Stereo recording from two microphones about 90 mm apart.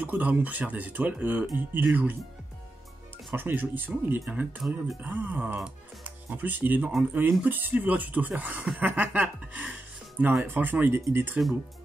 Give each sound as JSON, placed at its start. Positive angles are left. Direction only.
{"t": 0.0, "sound": "speech", "side_deg": -20}
{"t": 3.3, "sound": "speech", "side_deg": -20}
{"t": 4.6, "sound": "speech", "side_deg": -5}
{"t": 5.0, "sound": "speech", "side_deg": -20}